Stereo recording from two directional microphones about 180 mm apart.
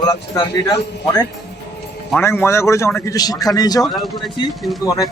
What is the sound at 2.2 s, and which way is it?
A man's voice, 15° left (ahead or behind).